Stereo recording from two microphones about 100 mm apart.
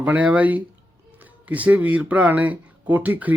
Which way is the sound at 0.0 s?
15° right (ahead or behind).